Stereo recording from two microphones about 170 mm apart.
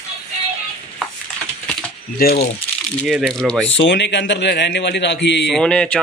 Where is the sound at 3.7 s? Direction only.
90° left.